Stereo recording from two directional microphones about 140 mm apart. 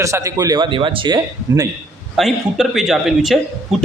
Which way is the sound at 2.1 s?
Centre (ahead or behind).